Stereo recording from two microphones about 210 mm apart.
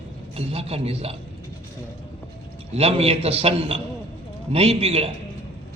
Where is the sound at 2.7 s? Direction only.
30° right (ahead or behind).